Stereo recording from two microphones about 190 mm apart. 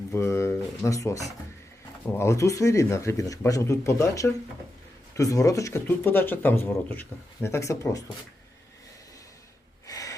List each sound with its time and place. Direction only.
0.1 s speech: 15° left (ahead or behind)
9.8 s gasp: 20° left (ahead or behind)